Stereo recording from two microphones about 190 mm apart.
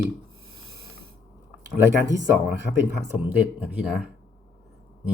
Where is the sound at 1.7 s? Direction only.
15° right (ahead or behind).